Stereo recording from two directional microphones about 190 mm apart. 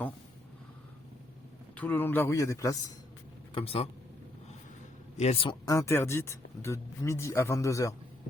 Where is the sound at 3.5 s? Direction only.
30° left (ahead or behind).